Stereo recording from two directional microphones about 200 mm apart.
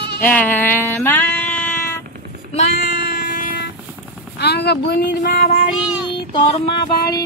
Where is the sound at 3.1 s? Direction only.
45° left (ahead or behind).